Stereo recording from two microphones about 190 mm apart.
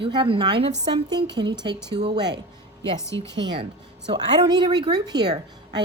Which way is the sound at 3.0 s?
15° left (ahead or behind).